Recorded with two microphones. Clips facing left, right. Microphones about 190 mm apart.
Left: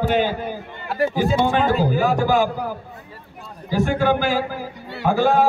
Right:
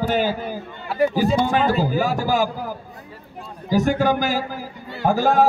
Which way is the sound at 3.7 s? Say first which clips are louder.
Right 1 dB; 40° right (ahead or behind).